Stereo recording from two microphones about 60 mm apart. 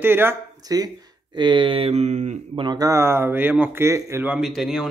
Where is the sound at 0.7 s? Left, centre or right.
Right.